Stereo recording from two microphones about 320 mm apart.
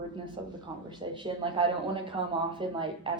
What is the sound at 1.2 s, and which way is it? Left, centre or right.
Speech, centre.